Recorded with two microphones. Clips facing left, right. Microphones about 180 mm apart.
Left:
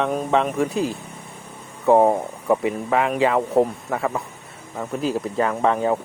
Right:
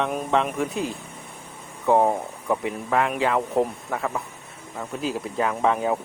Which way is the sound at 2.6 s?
Centre (ahead or behind).